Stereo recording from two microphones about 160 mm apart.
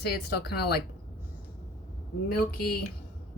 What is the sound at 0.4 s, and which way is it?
Speech, 85° left.